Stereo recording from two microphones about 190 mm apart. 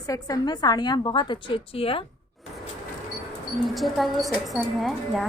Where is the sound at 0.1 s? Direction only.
20° left (ahead or behind).